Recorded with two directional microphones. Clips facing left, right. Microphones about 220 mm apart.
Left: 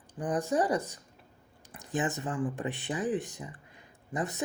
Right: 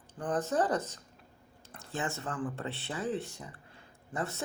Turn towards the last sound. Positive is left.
turn(degrees=15)  # may be behind; listen again after turning